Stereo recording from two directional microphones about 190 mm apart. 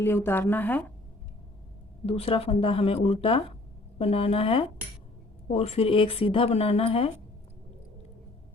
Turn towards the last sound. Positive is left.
turn(degrees=30)  # may be behind; listen again after turning